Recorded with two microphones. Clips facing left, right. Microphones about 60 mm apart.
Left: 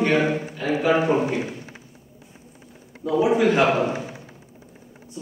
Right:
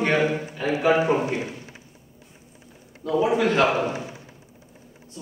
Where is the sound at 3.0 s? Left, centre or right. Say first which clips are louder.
Left 2 dB; centre.